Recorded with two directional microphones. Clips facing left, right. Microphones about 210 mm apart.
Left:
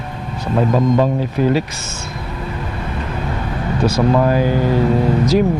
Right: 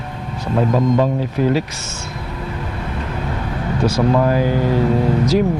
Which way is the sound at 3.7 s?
25° left (ahead or behind).